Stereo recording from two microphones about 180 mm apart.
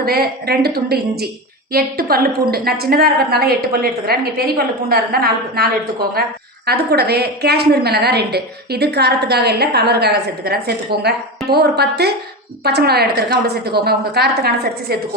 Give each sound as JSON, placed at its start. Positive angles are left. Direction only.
{"t": 0.0, "sound": "a woman's voice", "side_deg": -60}
{"t": 6.7, "sound": "a woman's voice", "side_deg": -60}